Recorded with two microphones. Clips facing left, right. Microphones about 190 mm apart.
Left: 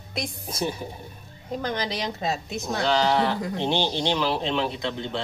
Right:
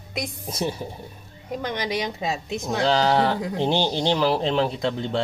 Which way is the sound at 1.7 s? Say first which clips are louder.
Right 3 dB; 15° right (ahead or behind).